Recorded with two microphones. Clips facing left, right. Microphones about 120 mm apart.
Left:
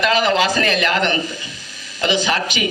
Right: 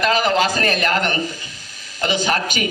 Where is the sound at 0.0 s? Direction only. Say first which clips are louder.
Left 1 dB; 45° right (ahead or behind).